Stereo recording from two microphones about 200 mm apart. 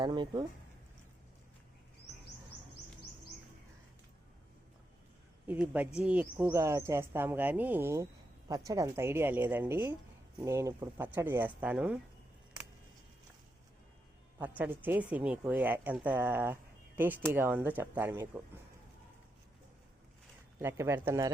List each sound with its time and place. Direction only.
0.0 s speech: 20° right (ahead or behind)
5.5 s speech: 5° right (ahead or behind)
14.6 s speech: 10° right (ahead or behind)
20.6 s speech: 10° right (ahead or behind)